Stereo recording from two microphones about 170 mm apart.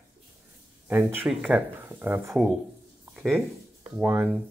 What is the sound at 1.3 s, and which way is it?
Speech, 5° right (ahead or behind).